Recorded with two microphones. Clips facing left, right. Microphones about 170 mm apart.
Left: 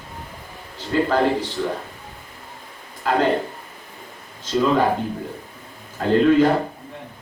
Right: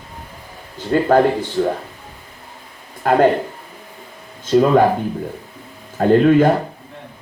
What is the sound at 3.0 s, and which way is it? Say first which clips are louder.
Speech: right 6 dB; 50° right (ahead or behind).